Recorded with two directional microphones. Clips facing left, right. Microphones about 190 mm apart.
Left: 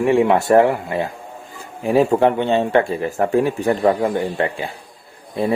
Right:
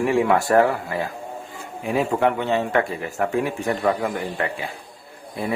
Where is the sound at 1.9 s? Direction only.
35° left (ahead or behind).